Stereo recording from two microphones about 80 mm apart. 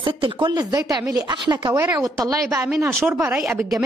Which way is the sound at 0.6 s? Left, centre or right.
Right.